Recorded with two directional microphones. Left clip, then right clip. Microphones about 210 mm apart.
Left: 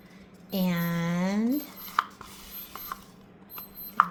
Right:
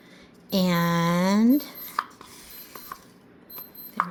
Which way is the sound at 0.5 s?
45° right (ahead or behind).